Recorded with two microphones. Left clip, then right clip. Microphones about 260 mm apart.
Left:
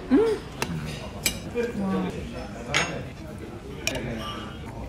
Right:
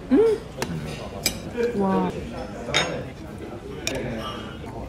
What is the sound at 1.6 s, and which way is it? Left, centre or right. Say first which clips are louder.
Speech: right 8 dB; centre.